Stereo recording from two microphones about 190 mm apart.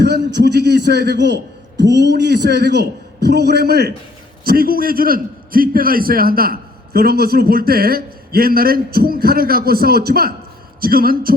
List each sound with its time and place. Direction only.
0.0 s a man's voice: 60° right (ahead or behind)